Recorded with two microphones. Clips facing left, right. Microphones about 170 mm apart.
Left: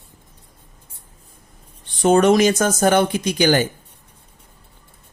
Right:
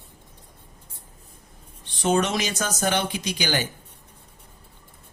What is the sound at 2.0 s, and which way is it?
Speech, 50° left (ahead or behind).